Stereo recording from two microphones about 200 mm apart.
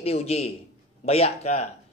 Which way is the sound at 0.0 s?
30° left (ahead or behind).